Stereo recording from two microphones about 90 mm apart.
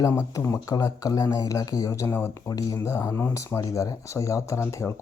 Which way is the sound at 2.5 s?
40° left (ahead or behind).